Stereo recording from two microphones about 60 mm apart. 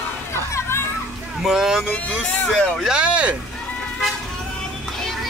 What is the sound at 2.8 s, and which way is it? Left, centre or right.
Speech, centre.